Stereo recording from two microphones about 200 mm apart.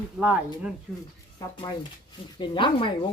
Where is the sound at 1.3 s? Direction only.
25° left (ahead or behind).